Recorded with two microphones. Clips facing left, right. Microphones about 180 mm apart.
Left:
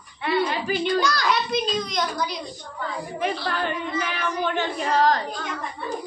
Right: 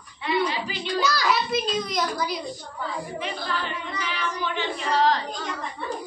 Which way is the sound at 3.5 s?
55° left (ahead or behind).